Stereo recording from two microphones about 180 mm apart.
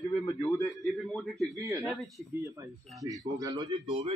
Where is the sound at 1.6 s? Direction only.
15° right (ahead or behind).